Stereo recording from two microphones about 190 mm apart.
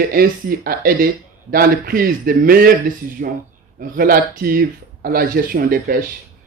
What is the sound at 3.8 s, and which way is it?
Speech, 50° right (ahead or behind).